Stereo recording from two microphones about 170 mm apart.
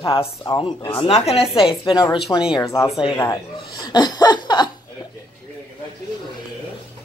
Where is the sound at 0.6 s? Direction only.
35° left (ahead or behind).